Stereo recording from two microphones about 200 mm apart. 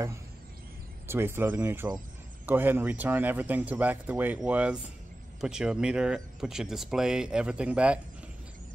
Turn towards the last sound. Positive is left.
turn(degrees=-5)  # may be behind; listen again after turning